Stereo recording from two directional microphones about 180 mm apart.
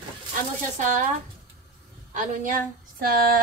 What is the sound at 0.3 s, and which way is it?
Speech, 45° right (ahead or behind).